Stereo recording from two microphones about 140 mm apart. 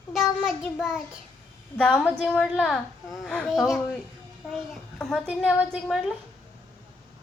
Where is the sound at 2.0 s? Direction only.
5° right (ahead or behind).